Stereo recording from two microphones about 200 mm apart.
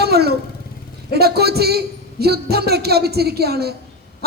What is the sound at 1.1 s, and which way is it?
A man's voice, 50° right (ahead or behind).